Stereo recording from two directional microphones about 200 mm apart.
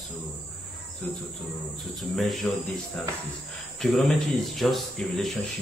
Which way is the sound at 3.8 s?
Centre (ahead or behind).